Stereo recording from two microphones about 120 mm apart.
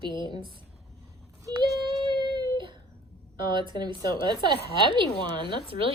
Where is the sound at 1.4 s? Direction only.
30° right (ahead or behind).